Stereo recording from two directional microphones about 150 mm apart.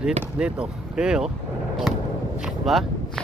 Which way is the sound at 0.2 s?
5° right (ahead or behind).